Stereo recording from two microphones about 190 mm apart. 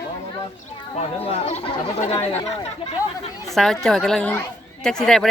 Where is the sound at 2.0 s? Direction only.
35° left (ahead or behind).